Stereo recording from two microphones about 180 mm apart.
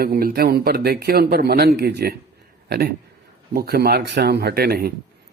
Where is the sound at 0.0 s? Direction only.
55° right (ahead or behind).